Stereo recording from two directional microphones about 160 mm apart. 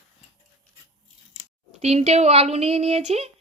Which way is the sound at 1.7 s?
40° right (ahead or behind).